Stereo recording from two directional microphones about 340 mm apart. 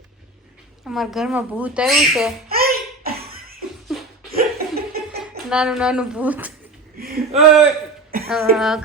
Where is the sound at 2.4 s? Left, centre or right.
Right.